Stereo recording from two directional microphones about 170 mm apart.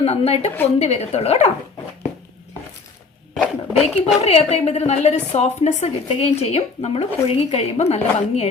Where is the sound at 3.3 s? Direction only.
Centre (ahead or behind).